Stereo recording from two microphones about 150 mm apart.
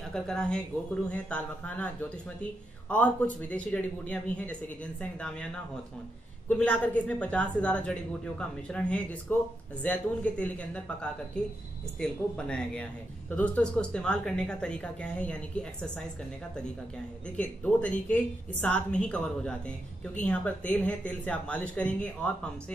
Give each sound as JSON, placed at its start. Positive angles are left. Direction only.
{"t": 0.1, "sound": "speech", "side_deg": 5}
{"t": 6.5, "sound": "speech", "side_deg": 10}
{"t": 17.4, "sound": "speech", "side_deg": 10}